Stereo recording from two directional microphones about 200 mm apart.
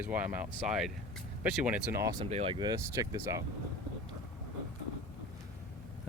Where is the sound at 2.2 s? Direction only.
30° right (ahead or behind).